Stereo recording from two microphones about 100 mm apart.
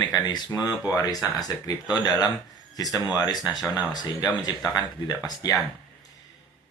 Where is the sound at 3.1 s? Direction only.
40° left (ahead or behind).